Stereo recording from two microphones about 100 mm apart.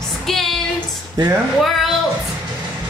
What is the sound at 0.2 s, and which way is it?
Female singing, centre (ahead or behind).